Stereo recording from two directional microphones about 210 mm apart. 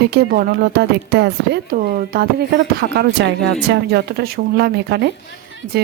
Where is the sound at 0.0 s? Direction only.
50° right (ahead or behind).